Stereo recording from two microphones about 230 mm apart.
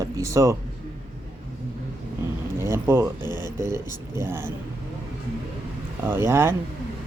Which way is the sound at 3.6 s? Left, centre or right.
Centre.